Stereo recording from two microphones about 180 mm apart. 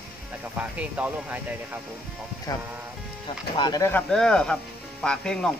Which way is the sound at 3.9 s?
5° left (ahead or behind).